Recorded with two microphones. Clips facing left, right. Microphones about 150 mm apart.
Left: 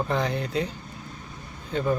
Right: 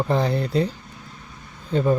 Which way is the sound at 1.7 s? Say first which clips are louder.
Right 5 dB; 35° right (ahead or behind).